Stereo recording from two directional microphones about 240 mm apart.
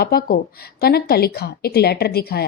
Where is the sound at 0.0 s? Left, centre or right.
Left.